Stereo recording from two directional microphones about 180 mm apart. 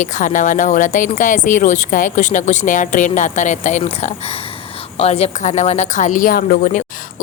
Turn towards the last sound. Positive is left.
turn(degrees=45)  # may be behind; listen again after turning